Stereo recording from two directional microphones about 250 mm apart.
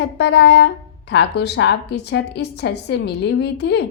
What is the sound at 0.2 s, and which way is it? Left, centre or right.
A woman's voice, left.